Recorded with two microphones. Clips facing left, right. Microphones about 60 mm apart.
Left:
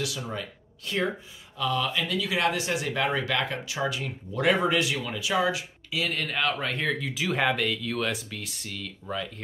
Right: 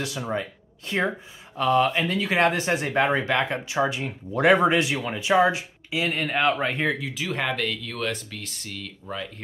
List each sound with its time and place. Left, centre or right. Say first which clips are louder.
0.3 s speech: right 6 dB; right
1.6 s speech: right 7 dB; right
7.0 s speech: left 1 dB; centre